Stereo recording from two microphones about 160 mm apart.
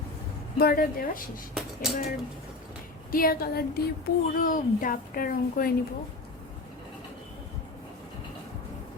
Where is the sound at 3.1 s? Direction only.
65° left (ahead or behind).